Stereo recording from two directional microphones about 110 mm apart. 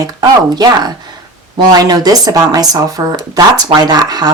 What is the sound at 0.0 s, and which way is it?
Speech, 35° right (ahead or behind).